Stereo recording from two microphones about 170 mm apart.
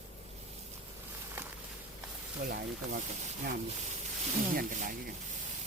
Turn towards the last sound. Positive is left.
turn(degrees=-55)  # may be behind; listen again after turning